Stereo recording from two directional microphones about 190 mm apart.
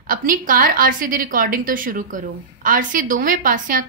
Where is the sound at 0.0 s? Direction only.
45° right (ahead or behind).